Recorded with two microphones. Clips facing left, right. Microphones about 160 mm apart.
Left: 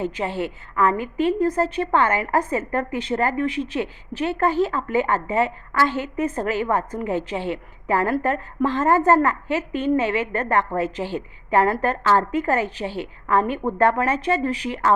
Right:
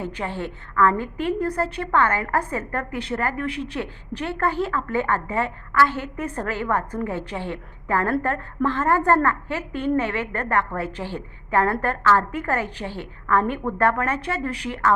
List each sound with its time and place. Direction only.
0.0 s a woman's voice: 15° left (ahead or behind)